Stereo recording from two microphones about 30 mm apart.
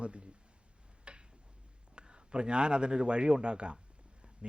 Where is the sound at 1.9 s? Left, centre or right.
Right.